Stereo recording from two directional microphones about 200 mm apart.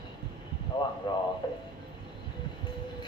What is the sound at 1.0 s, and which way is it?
Speech, 25° left (ahead or behind).